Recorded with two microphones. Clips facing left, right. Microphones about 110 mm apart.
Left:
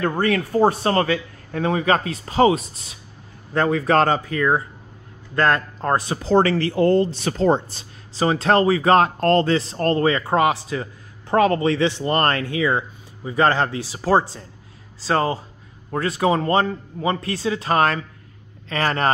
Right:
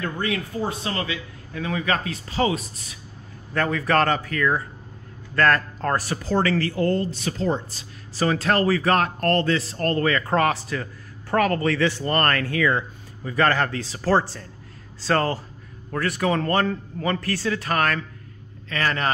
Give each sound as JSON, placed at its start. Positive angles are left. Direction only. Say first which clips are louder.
{"t": 0.0, "sound": "speech", "louder": "left 6 dB", "side_deg": 45}
{"t": 7.2, "sound": "speech", "louder": "left 6 dB", "side_deg": 35}
{"t": 8.2, "sound": "speech", "louder": "left 4 dB", "side_deg": 25}
{"t": 15.9, "sound": "speech", "louder": "left 3 dB", "side_deg": 25}